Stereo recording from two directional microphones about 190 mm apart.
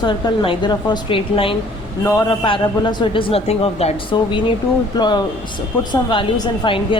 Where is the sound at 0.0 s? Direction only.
25° left (ahead or behind).